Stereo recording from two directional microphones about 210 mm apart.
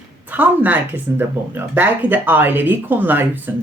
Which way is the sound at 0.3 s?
10° right (ahead or behind).